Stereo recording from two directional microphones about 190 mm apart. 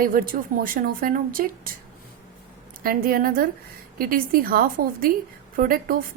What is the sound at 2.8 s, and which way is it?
A woman's voice, 50° right (ahead or behind).